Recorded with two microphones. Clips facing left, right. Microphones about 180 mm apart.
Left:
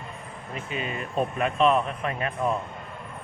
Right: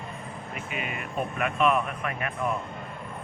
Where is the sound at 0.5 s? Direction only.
30° left (ahead or behind).